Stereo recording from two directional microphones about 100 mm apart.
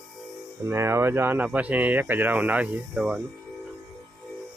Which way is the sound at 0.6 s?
25° right (ahead or behind).